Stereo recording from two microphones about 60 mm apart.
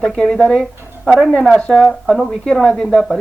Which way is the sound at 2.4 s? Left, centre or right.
Centre.